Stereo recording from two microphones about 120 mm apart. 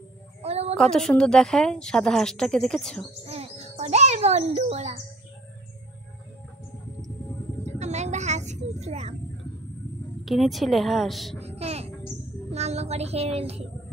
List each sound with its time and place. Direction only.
0.4 s a sound: 60° right (ahead or behind)
0.7 s a woman's voice: 5° left (ahead or behind)
3.3 s music: 60° right (ahead or behind)
4.6 s child singing: 60° right (ahead or behind)
7.6 s speech: 70° right (ahead or behind)
10.2 s a woman's voice: centre (ahead or behind)
11.3 s a sound: 60° right (ahead or behind)
12.5 s child singing: 65° right (ahead or behind)